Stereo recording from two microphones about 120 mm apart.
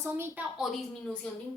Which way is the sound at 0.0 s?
20° right (ahead or behind).